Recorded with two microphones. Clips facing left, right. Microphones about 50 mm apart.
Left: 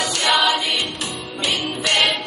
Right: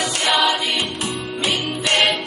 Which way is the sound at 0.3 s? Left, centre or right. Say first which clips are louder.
Even; centre.